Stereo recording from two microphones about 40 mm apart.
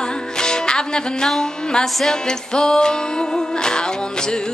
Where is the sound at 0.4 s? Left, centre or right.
Centre.